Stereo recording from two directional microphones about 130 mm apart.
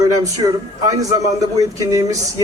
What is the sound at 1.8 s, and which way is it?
Speech, 25° right (ahead or behind).